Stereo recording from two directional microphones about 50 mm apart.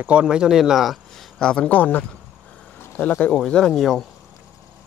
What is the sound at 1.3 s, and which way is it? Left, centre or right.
Speech, centre.